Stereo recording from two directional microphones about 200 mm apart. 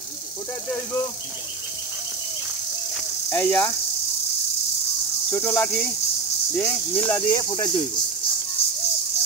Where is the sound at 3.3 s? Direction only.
10° left (ahead or behind).